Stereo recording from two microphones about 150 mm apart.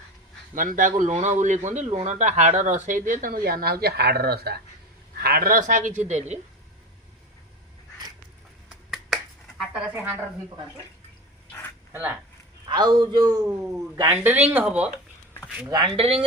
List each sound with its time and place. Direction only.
0.5 s speech: 65° right (ahead or behind)
6.0 s a woman's voice: 50° right (ahead or behind)
9.6 s a woman's voice: 10° right (ahead or behind)
12.6 s speech: 30° right (ahead or behind); by 14.8 s 10° right (ahead or behind)
15.6 s speech: 30° right (ahead or behind)